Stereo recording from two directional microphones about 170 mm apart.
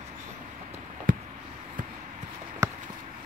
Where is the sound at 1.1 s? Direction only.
55° right (ahead or behind).